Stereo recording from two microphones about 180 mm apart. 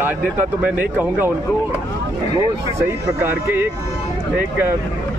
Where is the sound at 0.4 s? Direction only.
10° right (ahead or behind).